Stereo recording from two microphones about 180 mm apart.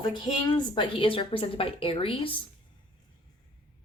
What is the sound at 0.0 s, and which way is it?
A woman's voice, 25° left (ahead or behind).